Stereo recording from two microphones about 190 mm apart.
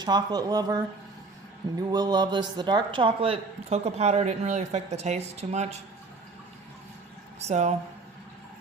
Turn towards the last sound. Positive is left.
turn(degrees=-35)  # may be behind; listen again after turning